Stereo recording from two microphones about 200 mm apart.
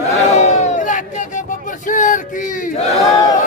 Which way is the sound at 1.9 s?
40° left (ahead or behind).